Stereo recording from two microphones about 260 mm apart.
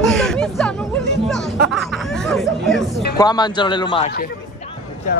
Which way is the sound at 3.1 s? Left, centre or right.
Centre.